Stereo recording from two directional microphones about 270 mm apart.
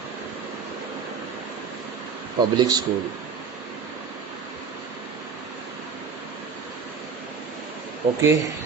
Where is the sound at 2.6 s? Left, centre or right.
Centre.